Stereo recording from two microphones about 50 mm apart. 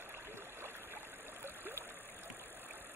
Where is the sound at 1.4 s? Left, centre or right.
Right.